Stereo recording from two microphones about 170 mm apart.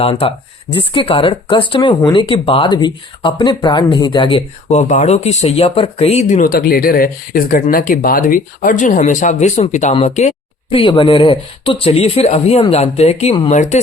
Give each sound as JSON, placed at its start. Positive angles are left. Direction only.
{"t": 0.0, "sound": "speech", "side_deg": 35}
{"t": 6.5, "sound": "speech", "side_deg": 60}